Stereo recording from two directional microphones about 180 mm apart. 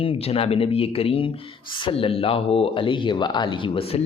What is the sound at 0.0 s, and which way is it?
Speech, 30° left (ahead or behind).